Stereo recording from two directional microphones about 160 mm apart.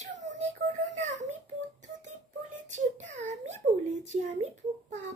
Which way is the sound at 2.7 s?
50° right (ahead or behind).